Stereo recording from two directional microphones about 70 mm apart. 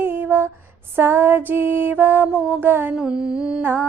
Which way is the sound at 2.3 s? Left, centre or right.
Centre.